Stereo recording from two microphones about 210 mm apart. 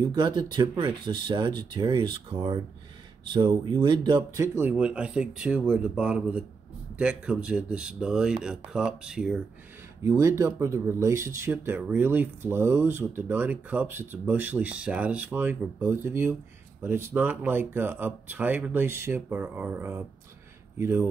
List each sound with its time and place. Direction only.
0.0 s speech: 20° right (ahead or behind); by 9.4 s 5° right (ahead or behind)
10.0 s speech: 15° right (ahead or behind)